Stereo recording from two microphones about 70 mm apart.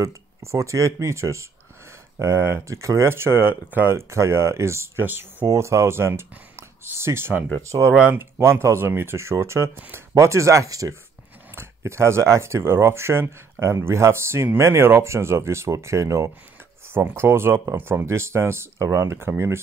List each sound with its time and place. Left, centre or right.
0.0 s speech: right
4.1 s speech: right
5.0 s speech: right
5.5 s speech: right
9.8 s speech: right
10.1 s speech: right